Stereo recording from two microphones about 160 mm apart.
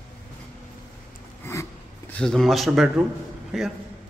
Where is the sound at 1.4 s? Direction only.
15° left (ahead or behind).